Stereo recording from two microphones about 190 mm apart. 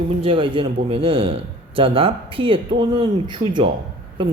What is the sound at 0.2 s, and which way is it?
A man's voice, 25° right (ahead or behind).